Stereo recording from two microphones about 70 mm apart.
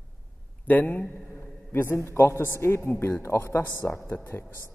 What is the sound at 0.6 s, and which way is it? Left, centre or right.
A man's voice, left.